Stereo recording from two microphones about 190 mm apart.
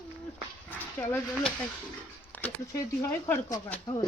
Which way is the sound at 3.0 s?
15° left (ahead or behind).